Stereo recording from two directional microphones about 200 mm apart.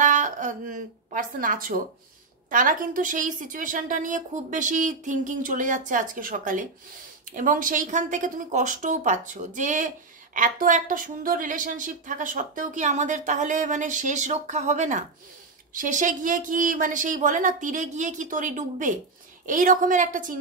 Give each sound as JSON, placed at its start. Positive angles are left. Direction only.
{"t": 0.0, "sound": "speech", "side_deg": -40}